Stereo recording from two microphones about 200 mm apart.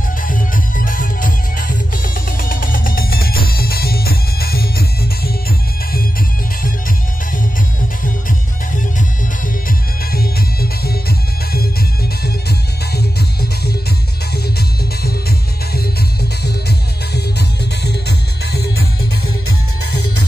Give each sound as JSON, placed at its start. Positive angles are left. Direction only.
{"t": 0.2, "sound": "music", "side_deg": 45}
{"t": 9.7, "sound": "music", "side_deg": 50}
{"t": 15.0, "sound": "music", "side_deg": 50}